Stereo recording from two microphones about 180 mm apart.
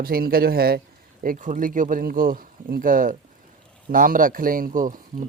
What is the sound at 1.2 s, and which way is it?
Speech, 50° right (ahead or behind).